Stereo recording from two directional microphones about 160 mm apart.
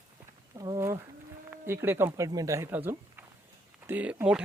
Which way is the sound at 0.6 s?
20° right (ahead or behind).